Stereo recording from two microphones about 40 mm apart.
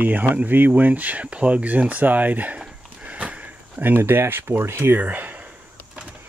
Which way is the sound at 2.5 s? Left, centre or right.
Right.